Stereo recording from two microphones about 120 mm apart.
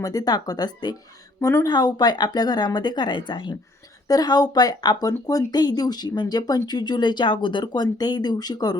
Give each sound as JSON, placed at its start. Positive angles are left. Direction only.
{"t": 0.0, "sound": "speech", "side_deg": 30}